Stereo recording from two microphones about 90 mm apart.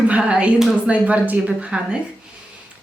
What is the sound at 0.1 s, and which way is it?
A woman's voice, 10° right (ahead or behind).